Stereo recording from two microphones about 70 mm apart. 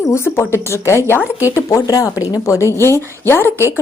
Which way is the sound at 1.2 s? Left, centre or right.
Right.